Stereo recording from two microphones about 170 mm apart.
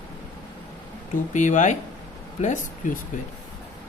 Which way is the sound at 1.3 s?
45° left (ahead or behind).